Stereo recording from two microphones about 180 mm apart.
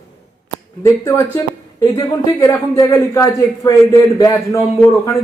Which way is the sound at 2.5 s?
20° left (ahead or behind).